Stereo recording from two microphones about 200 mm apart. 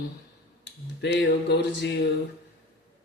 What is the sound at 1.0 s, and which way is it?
Speech, 60° left (ahead or behind).